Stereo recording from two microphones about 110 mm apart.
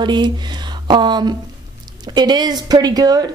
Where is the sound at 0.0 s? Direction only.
40° right (ahead or behind).